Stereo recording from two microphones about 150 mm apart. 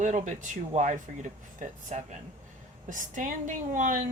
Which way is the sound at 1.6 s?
55° right (ahead or behind).